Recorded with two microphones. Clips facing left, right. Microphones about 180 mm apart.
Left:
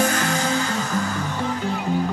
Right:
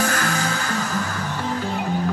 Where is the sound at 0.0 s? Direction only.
25° left (ahead or behind).